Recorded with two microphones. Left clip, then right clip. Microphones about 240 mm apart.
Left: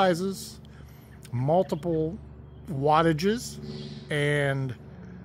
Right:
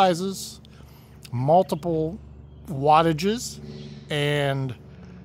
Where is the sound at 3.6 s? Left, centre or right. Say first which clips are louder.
Left 1 dB; left.